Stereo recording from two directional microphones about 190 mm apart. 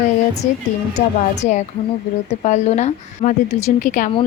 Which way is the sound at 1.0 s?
35° left (ahead or behind).